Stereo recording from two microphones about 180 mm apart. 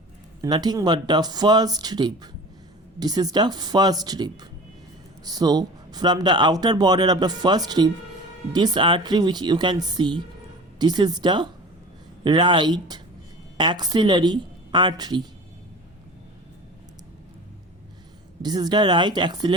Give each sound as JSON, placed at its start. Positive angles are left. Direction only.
{"t": 0.4, "sound": "speech", "side_deg": -20}
{"t": 18.4, "sound": "speech", "side_deg": -20}